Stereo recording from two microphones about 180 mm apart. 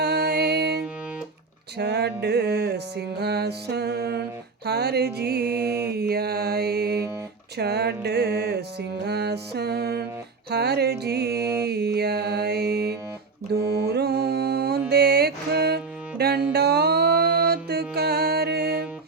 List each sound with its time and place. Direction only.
0.0 s music: 60° right (ahead or behind)
1.8 s music: 70° right (ahead or behind)